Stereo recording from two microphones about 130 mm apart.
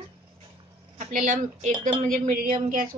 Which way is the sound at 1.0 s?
70° right (ahead or behind).